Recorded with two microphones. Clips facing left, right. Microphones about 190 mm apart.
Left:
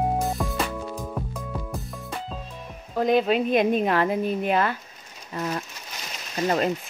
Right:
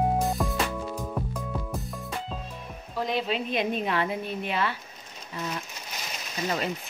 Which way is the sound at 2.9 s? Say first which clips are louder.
Left 8 dB; 50° left (ahead or behind).